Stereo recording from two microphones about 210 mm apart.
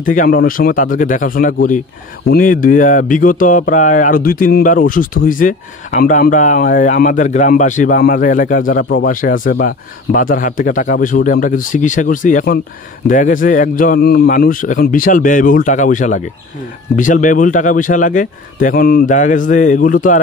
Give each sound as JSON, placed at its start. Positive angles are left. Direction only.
{"t": 0.0, "sound": "speech", "side_deg": 40}